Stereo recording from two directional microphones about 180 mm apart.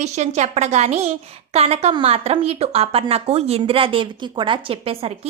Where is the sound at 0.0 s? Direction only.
40° right (ahead or behind).